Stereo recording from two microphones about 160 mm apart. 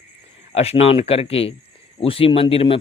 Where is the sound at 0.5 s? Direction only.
40° left (ahead or behind).